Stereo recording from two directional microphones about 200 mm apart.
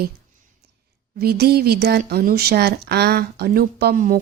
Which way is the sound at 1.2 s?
50° right (ahead or behind).